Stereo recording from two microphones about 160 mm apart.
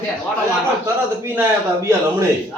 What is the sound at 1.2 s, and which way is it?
Speech, 15° right (ahead or behind).